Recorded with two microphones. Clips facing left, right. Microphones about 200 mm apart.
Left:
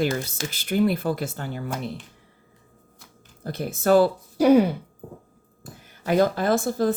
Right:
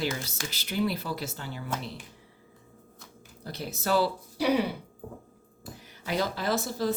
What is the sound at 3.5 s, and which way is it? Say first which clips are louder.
Speech: left 9 dB; 50° left (ahead or behind).